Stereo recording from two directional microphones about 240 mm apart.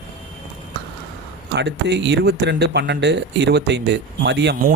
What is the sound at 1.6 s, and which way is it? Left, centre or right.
Speech, right.